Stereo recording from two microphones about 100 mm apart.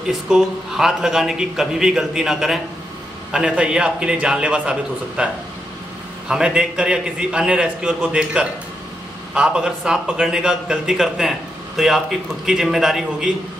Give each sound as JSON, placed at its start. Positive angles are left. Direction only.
{"t": 0.3, "sound": "a man's voice", "side_deg": -5}